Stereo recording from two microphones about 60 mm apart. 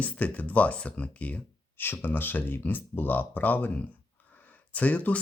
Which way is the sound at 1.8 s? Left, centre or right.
Left.